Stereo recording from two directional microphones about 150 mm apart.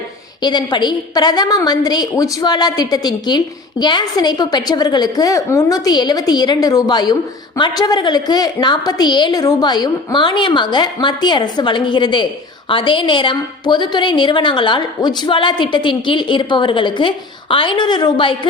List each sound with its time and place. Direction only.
0.4 s a woman's voice: 30° left (ahead or behind)